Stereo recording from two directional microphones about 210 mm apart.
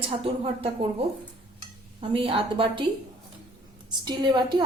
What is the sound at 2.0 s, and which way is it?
Speech, 25° right (ahead or behind).